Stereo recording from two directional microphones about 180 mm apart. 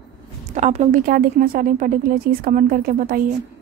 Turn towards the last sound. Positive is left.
turn(degrees=-55)  # may be behind; listen again after turning